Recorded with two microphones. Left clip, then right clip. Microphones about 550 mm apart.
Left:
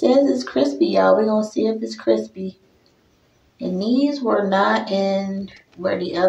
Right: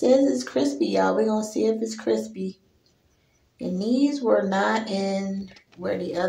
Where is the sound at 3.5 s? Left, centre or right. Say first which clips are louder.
Left 4 dB; right.